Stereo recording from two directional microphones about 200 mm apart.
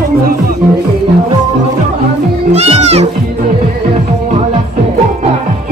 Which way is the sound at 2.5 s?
30° right (ahead or behind).